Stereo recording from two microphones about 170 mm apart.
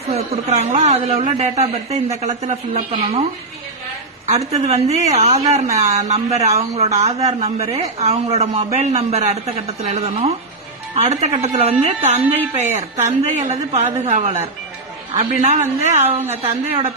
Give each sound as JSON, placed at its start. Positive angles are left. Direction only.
{"t": 0.1, "sound": "a man's voice", "side_deg": -40}
{"t": 4.5, "sound": "a man's voice", "side_deg": -40}